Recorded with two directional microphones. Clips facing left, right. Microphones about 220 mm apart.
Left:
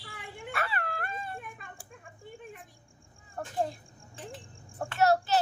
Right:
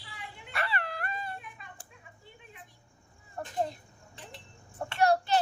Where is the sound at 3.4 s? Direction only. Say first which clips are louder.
Left 1 dB; 5° left (ahead or behind).